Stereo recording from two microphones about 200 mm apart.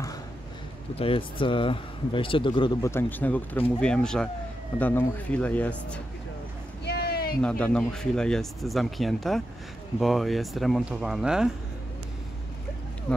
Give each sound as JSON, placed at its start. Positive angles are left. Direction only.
{"t": 0.9, "sound": "speech", "side_deg": 25}
{"t": 6.8, "sound": "a sound", "side_deg": 55}
{"t": 7.4, "sound": "speech", "side_deg": 5}